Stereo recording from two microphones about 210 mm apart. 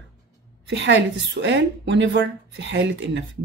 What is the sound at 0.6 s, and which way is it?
A woman's voice, 55° right (ahead or behind).